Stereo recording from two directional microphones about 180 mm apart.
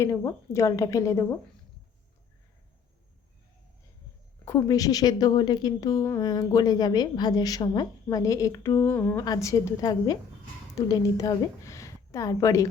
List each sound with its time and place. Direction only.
0.0 s a woman's voice: 15° left (ahead or behind)
4.4 s a woman's voice: 15° left (ahead or behind)